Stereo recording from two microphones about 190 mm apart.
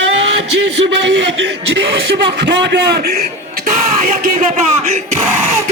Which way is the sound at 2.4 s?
65° right (ahead or behind).